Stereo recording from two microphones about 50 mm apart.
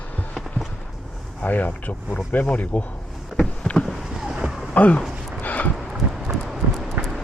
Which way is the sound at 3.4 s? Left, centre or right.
Left.